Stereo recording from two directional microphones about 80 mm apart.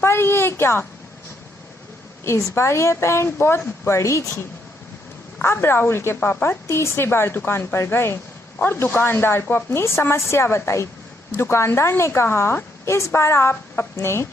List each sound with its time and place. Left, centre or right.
0.0 s a woman's voice: left
2.6 s speech: left
5.4 s speech: left